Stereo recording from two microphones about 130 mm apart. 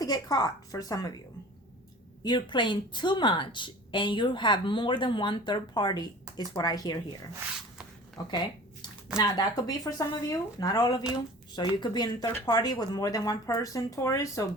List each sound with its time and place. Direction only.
0.0 s a woman's voice: 30° left (ahead or behind)
2.2 s a woman's voice: 35° left (ahead or behind)
8.2 s a woman's voice: 30° left (ahead or behind)